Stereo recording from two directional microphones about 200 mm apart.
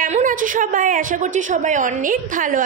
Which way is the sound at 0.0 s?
40° right (ahead or behind).